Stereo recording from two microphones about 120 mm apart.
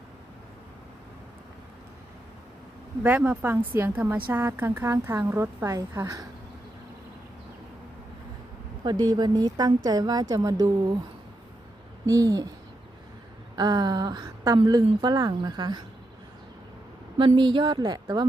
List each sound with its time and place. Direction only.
3.0 s a woman's voice: 10° right (ahead or behind)
8.8 s a woman's voice: 35° right (ahead or behind)
12.0 s speech: 30° right (ahead or behind)
13.6 s a woman's voice: 35° right (ahead or behind)
17.2 s a woman's voice: 45° right (ahead or behind)